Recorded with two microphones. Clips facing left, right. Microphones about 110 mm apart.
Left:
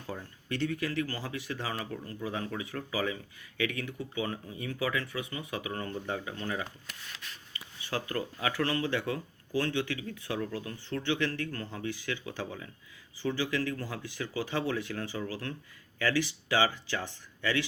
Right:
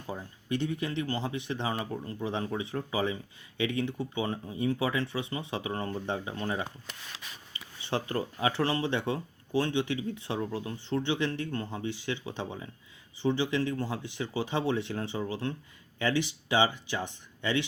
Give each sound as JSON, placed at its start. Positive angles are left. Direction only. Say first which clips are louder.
{"t": 0.1, "sound": "speech", "louder": "right 4 dB", "side_deg": -20}